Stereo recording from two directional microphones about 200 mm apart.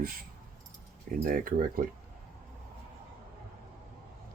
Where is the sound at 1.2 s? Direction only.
45° right (ahead or behind).